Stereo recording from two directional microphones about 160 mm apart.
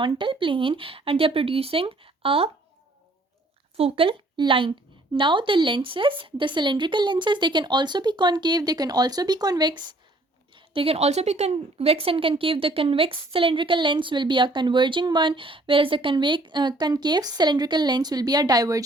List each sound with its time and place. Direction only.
0.0 s a woman's voice: 30° right (ahead or behind)
3.8 s a woman's voice: 35° right (ahead or behind)